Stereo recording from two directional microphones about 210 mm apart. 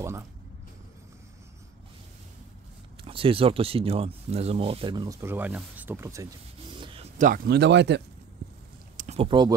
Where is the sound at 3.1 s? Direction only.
25° right (ahead or behind).